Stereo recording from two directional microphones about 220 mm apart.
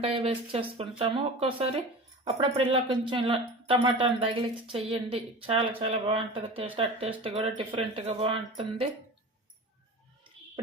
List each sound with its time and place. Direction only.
0.0 s speech: 25° right (ahead or behind)